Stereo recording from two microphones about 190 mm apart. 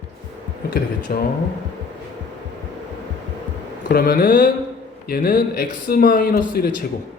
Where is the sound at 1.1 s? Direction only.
50° left (ahead or behind).